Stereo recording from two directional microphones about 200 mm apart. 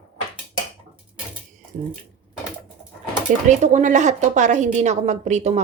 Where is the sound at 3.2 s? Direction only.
35° right (ahead or behind).